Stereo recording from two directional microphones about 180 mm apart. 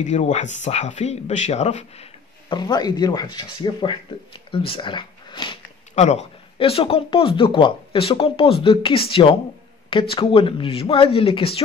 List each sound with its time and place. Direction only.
0.0 s speech: 40° left (ahead or behind)
2.5 s speech: 25° left (ahead or behind)
5.9 s speech: 40° left (ahead or behind)